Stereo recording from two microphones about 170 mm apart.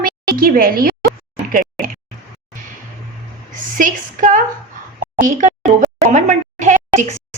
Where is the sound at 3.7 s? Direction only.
50° right (ahead or behind).